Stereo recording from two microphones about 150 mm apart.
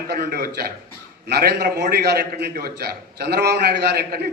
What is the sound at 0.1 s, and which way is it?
A man's voice, 90° right.